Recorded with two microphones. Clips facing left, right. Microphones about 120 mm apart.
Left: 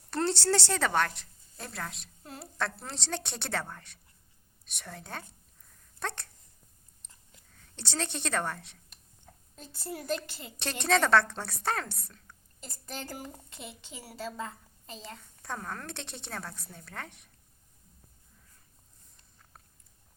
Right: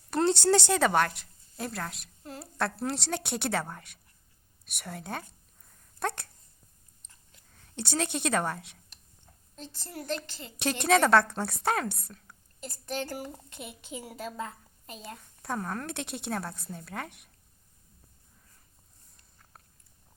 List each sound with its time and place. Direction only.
0.1 s a woman's voice: 15° right (ahead or behind)
6.0 s dog: 10° right (ahead or behind)
7.0 s chewing: 70° left (ahead or behind)
7.8 s a woman's voice: 10° right (ahead or behind)
9.6 s speech: 5° left (ahead or behind)
10.6 s a woman's voice: 10° right (ahead or behind)
12.8 s speech: centre (ahead or behind)
13.8 s a woman's voice: 20° right (ahead or behind)
14.3 s a sound: 5° right (ahead or behind)
15.0 s a woman's voice: 10° right (ahead or behind)